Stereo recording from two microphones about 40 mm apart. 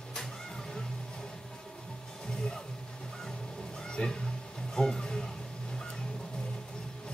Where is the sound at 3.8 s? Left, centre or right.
Left.